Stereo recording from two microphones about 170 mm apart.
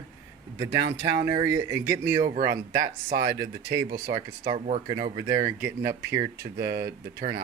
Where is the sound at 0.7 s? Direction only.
90° right.